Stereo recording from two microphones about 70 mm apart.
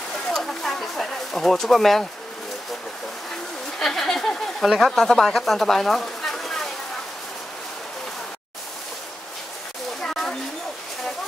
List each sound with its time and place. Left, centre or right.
0.3 s bird: centre
3.8 s speech: centre
10.0 s a sound: centre